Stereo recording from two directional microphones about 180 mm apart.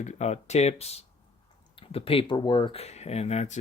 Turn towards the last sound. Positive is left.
turn(degrees=40)  # may be behind; listen again after turning